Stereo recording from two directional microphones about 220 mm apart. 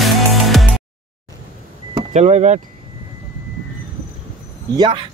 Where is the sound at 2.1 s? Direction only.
30° right (ahead or behind).